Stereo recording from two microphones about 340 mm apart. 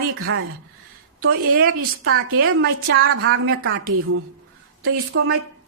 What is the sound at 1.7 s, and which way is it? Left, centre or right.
A woman's voice, right.